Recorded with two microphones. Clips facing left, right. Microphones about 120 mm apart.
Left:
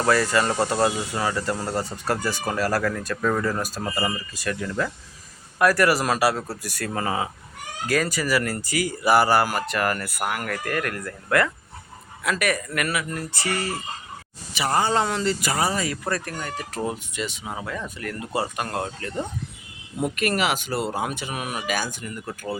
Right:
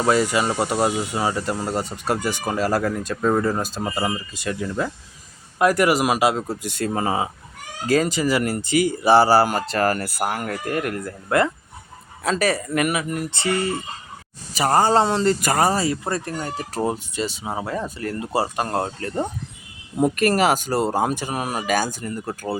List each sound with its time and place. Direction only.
0.0 s speech: 15° right (ahead or behind)
14.5 s speech: 45° right (ahead or behind)
15.8 s speech: 25° right (ahead or behind)